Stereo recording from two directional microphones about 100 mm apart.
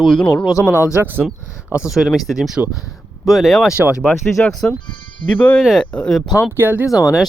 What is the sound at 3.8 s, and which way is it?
Speech, 10° right (ahead or behind).